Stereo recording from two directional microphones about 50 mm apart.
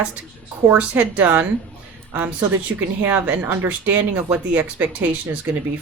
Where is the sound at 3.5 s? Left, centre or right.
Right.